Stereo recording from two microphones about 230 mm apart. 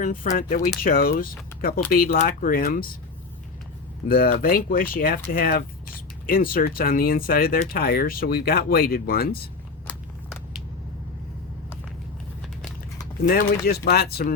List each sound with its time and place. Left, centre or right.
0.0 s speech: left
4.1 s speech: left
13.2 s speech: left